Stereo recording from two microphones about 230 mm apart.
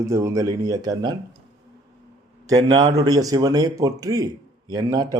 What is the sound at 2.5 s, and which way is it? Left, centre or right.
A man's voice, centre.